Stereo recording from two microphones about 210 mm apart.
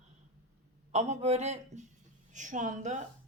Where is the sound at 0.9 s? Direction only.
30° right (ahead or behind).